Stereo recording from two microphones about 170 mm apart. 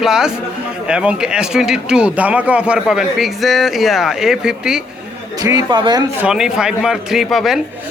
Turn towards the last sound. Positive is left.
turn(degrees=0)  # may be behind; listen again after turning